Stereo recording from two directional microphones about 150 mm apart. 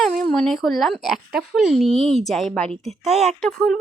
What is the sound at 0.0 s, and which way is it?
A woman's voice, centre (ahead or behind).